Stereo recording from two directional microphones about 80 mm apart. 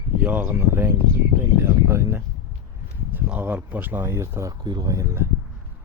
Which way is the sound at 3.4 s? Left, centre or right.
Right.